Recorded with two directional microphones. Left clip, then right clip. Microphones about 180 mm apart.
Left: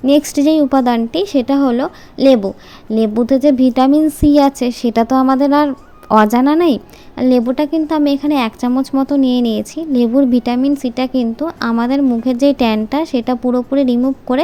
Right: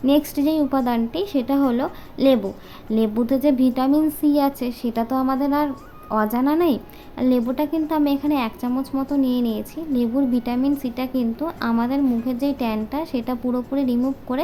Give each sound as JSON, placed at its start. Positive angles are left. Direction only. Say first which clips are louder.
{"t": 0.0, "sound": "speech", "louder": "left 7 dB", "side_deg": 30}